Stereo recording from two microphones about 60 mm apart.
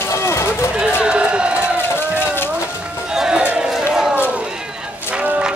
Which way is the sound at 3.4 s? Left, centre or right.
Right.